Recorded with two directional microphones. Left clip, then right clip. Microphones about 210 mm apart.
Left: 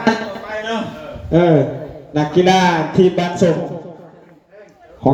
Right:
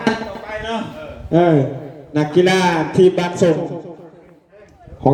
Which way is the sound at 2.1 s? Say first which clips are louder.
Left 1 dB; 55° right (ahead or behind).